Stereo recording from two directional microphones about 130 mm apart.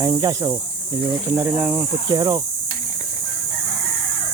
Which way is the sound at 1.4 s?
15° right (ahead or behind).